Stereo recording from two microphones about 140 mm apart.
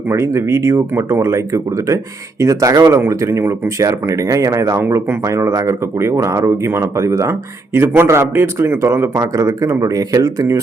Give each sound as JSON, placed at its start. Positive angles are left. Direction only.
{"t": 0.1, "sound": "speech", "side_deg": -20}